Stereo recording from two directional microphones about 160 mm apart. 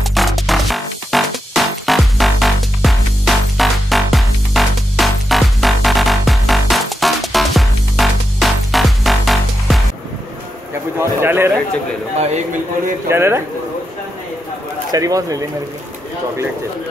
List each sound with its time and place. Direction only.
0.0 s music: centre (ahead or behind)
11.0 s a sound: 15° right (ahead or behind)
13.1 s speech: 15° right (ahead or behind)
14.9 s speech: 20° right (ahead or behind)